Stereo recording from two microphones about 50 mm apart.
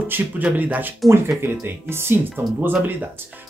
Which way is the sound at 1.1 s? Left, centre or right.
Right.